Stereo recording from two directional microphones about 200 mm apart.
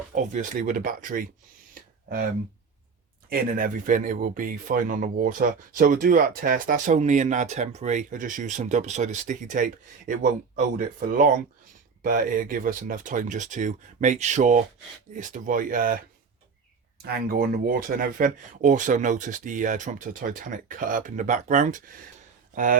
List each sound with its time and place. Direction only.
0.1 s speech: 40° right (ahead or behind)
1.7 s a sound: 45° right (ahead or behind)
3.2 s speech: 45° right (ahead or behind)